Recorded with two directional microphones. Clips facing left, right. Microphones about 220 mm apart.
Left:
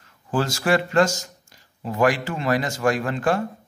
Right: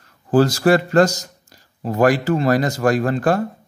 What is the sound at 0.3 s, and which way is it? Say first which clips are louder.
Speech: right 7 dB; 35° right (ahead or behind).